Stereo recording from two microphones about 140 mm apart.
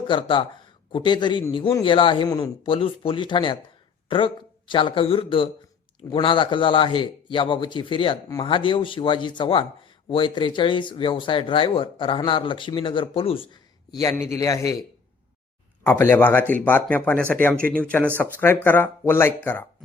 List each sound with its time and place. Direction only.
0.1 s a man's voice: 35° left (ahead or behind)
2.6 s a man's voice: 40° left (ahead or behind)
14.1 s a man's voice: 20° left (ahead or behind)
15.8 s speech: 15° left (ahead or behind)